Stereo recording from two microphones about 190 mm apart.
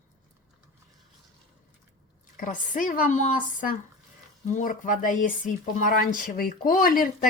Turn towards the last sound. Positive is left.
turn(degrees=50)  # may be behind; listen again after turning